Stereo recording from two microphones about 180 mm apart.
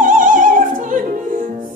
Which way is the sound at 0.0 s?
45° right (ahead or behind).